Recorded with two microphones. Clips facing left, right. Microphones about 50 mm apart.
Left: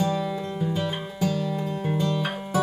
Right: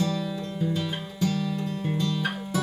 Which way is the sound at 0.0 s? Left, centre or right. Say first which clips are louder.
Left 3 dB; left.